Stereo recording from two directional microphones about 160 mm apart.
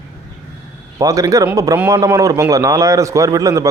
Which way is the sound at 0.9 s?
20° right (ahead or behind).